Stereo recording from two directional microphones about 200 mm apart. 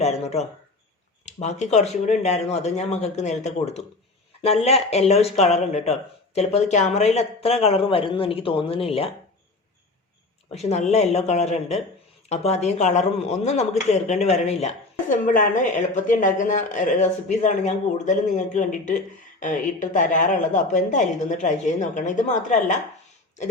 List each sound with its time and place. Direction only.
0.0 s a sound: 35° left (ahead or behind)
1.2 s a woman's voice: 35° left (ahead or behind)
10.5 s a woman's voice: 35° left (ahead or behind)